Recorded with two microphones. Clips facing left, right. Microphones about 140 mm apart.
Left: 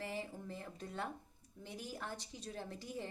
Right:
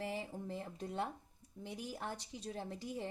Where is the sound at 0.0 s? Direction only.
20° right (ahead or behind).